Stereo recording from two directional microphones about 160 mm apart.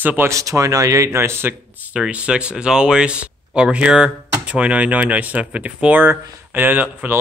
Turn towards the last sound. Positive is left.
turn(degrees=-10)  # may be behind; listen again after turning